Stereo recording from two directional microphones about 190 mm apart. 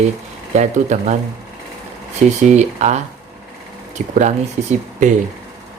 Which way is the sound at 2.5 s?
40° right (ahead or behind).